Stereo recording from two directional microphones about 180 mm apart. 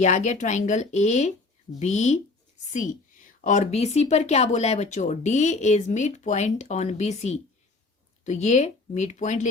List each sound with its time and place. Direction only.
0.0 s speech: 40° left (ahead or behind)
3.4 s speech: 40° left (ahead or behind)